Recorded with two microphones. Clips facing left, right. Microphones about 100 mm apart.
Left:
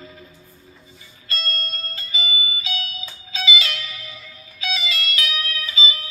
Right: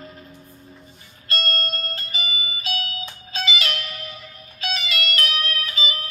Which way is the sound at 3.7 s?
55° right (ahead or behind).